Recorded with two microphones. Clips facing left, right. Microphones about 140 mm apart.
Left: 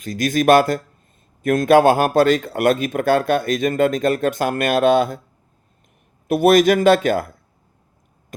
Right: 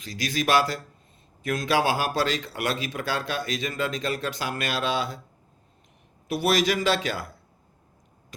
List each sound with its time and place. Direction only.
0.0 s speech: 50° left (ahead or behind)
6.2 s speech: 50° left (ahead or behind)